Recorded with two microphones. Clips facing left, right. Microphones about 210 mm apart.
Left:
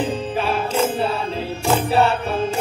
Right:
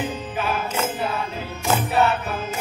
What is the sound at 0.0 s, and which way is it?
Music, 30° left (ahead or behind).